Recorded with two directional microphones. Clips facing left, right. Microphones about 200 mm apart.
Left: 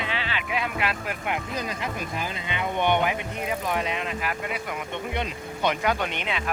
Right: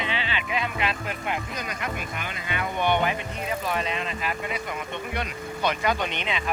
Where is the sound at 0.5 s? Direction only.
5° left (ahead or behind).